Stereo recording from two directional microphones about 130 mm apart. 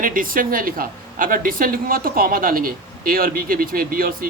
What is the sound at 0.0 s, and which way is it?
Speech, 90° right.